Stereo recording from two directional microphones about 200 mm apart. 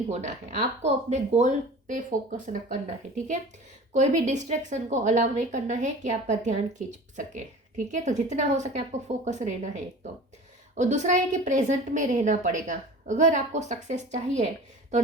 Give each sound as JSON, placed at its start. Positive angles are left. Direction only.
{"t": 0.1, "sound": "a woman's voice", "side_deg": -35}
{"t": 3.9, "sound": "a woman's voice", "side_deg": -35}